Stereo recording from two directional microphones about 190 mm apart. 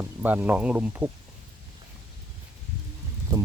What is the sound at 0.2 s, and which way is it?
Speech, 10° right (ahead or behind).